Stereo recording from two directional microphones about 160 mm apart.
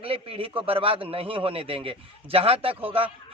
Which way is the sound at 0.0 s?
35° right (ahead or behind).